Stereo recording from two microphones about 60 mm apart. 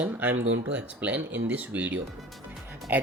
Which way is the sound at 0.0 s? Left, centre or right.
Right.